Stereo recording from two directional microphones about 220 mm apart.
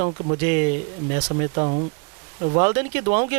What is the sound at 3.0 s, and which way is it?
Speech, 40° right (ahead or behind).